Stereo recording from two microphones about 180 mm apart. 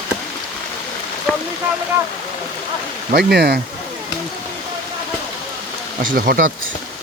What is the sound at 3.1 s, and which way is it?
Speech, 65° right (ahead or behind).